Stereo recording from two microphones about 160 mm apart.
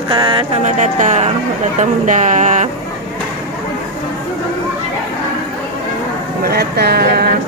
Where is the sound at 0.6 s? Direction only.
50° right (ahead or behind).